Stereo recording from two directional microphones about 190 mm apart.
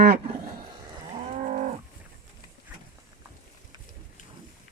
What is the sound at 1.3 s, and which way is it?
Livestock, 40° right (ahead or behind).